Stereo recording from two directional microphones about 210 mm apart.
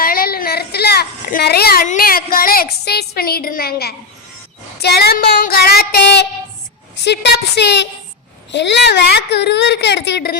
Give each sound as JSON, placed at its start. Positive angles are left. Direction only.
{"t": 0.0, "sound": "a woman's voice", "side_deg": 45}